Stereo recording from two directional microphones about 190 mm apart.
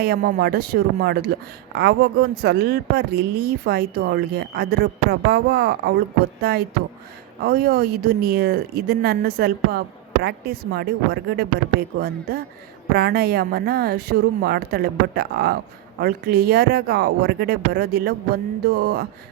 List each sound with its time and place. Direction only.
0.0 s speech: 55° right (ahead or behind)